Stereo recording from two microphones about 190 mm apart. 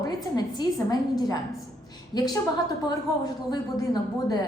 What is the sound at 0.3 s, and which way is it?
Speech, 20° left (ahead or behind).